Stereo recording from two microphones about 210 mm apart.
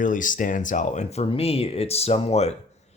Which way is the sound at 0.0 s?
40° left (ahead or behind).